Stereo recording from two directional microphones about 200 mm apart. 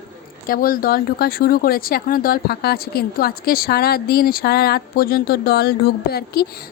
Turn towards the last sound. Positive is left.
turn(degrees=50)  # may be behind; listen again after turning